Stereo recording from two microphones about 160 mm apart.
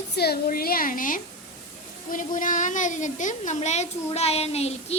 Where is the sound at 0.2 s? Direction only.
75° left (ahead or behind).